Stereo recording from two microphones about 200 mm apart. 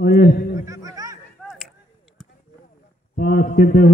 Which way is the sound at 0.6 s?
15° right (ahead or behind).